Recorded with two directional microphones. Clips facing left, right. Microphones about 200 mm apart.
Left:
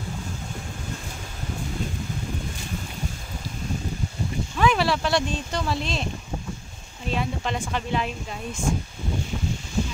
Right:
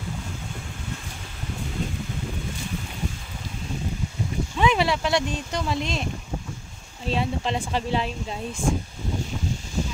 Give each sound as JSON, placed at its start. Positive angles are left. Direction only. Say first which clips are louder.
{"t": 4.6, "sound": "speech", "louder": "even", "side_deg": -20}
{"t": 7.1, "sound": "speech", "louder": "right 2 dB", "side_deg": -30}